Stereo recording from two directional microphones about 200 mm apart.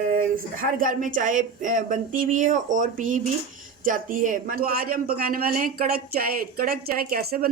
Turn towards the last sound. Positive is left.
turn(degrees=-45)  # may be behind; listen again after turning